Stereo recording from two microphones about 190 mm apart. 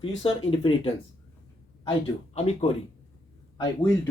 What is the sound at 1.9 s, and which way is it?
Speech, 30° left (ahead or behind).